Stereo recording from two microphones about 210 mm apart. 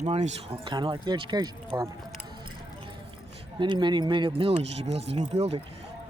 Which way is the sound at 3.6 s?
20° right (ahead or behind).